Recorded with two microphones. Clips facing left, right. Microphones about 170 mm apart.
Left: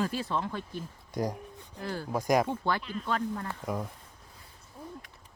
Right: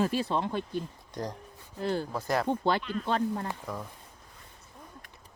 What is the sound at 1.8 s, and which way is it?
Speech, 25° right (ahead or behind).